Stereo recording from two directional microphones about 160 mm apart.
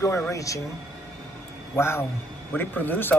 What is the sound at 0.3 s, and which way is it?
Speech, 20° left (ahead or behind).